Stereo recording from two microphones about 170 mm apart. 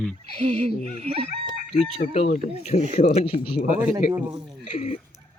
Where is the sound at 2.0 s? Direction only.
55° left (ahead or behind).